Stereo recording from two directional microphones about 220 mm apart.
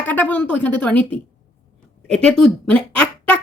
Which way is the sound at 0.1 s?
5° left (ahead or behind).